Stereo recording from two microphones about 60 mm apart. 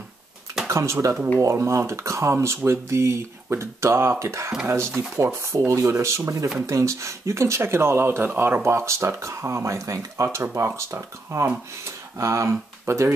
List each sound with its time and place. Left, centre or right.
0.7 s speech: right
8.6 s speech: right
11.8 s speech: right